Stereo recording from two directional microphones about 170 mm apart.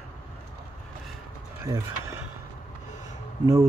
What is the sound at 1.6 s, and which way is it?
Speech, 15° right (ahead or behind).